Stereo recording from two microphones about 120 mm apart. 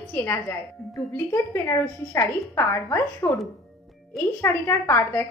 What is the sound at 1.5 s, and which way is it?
A woman's voice, 25° left (ahead or behind).